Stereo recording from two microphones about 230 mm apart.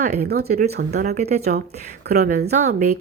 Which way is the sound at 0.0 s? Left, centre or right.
Right.